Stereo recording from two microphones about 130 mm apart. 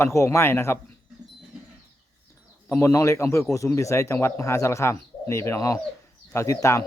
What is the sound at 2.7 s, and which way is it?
Speech, 20° left (ahead or behind).